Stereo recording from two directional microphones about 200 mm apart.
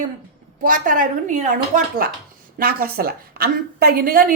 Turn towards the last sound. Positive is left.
turn(degrees=-45)  # may be behind; listen again after turning